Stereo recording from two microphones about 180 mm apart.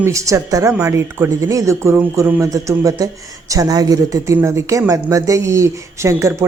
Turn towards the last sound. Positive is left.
turn(degrees=-15)  # may be behind; listen again after turning